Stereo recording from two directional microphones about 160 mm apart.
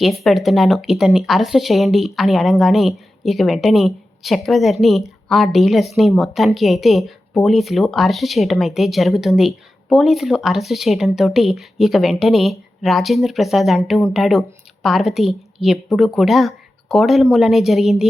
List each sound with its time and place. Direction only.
0.0 s speech: centre (ahead or behind)